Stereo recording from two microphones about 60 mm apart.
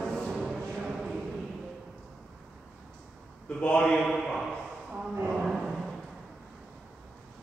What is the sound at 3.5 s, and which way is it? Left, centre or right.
Speech, left.